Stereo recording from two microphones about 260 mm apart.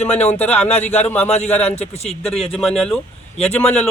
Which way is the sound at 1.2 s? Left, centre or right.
Left.